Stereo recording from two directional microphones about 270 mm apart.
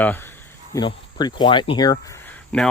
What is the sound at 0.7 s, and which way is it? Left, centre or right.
Speech, centre.